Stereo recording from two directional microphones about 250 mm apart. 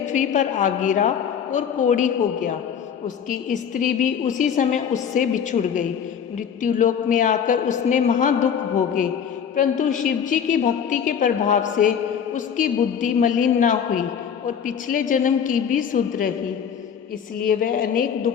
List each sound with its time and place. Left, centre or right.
0.0 s a woman's voice: left
17.4 s a woman's voice: left